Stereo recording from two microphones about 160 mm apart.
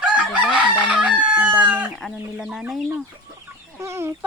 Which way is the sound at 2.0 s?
Centre (ahead or behind).